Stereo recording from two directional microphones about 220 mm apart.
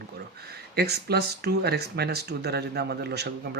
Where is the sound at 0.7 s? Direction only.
45° right (ahead or behind).